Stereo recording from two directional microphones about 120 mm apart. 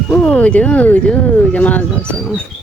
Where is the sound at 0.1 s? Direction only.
10° left (ahead or behind).